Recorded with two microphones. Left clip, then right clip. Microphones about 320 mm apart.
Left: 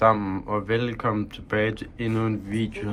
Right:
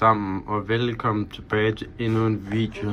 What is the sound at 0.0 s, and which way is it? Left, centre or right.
Speech, centre.